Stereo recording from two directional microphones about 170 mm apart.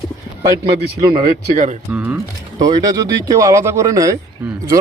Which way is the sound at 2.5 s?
20° right (ahead or behind).